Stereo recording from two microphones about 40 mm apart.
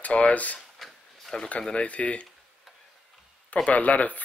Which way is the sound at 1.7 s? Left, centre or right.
Left.